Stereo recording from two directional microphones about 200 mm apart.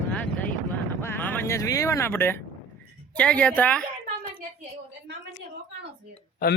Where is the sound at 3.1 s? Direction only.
5° left (ahead or behind).